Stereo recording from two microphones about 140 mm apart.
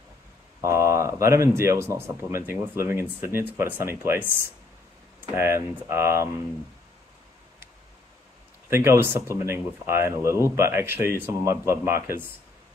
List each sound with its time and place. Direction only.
0.6 s a sound: 20° right (ahead or behind)
1.2 s speech: 20° right (ahead or behind)
8.6 s speech: 20° right (ahead or behind)